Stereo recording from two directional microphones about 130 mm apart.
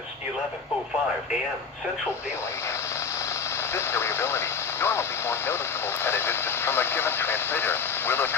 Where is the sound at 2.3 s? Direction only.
20° left (ahead or behind).